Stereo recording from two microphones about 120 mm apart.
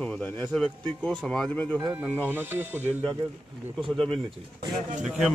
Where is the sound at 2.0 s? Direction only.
15° right (ahead or behind).